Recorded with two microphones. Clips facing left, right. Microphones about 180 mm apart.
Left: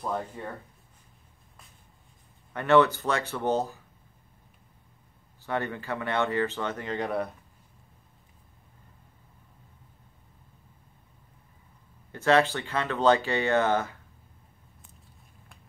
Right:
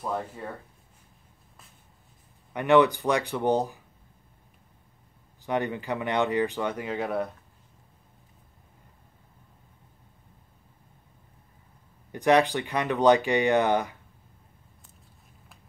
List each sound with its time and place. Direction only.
0.0 s speech: centre (ahead or behind)
2.5 s speech: 15° right (ahead or behind)
5.4 s speech: 15° right (ahead or behind)
12.1 s speech: 15° right (ahead or behind)